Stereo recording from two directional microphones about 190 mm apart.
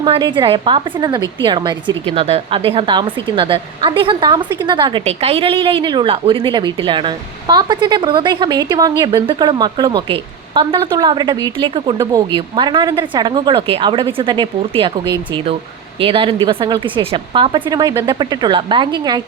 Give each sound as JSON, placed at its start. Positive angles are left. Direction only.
{"t": 0.0, "sound": "a woman's voice", "side_deg": -25}
{"t": 16.0, "sound": "a woman's voice", "side_deg": -30}